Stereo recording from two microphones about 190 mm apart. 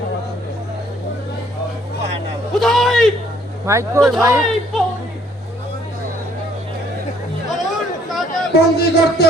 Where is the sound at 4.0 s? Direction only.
Centre (ahead or behind).